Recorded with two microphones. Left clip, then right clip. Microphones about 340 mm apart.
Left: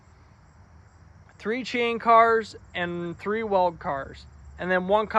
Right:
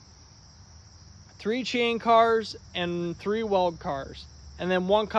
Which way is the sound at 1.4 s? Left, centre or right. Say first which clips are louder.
Even; centre.